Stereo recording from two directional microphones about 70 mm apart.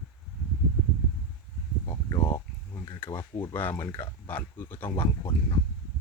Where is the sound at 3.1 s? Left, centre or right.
Left.